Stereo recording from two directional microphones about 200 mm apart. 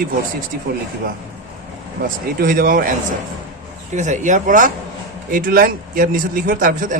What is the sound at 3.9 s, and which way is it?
A man's voice, 35° right (ahead or behind).